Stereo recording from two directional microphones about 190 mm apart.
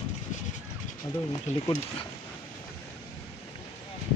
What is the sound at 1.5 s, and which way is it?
Speech, 40° left (ahead or behind).